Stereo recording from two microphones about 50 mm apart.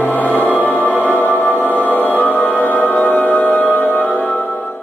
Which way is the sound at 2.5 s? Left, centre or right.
Left.